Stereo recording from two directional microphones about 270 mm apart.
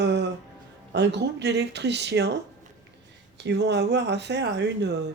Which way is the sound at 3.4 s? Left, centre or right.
Right.